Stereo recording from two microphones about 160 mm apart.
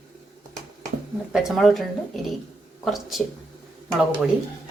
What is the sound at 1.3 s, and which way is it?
Speech, centre (ahead or behind).